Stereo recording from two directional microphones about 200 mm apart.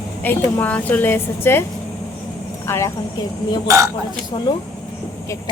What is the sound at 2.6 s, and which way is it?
Speech, 10° left (ahead or behind).